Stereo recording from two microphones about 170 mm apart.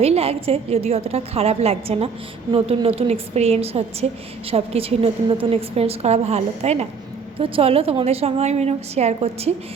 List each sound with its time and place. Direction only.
0.0 s a woman's voice: 35° right (ahead or behind)